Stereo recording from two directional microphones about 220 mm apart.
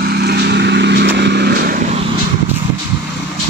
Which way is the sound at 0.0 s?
45° right (ahead or behind).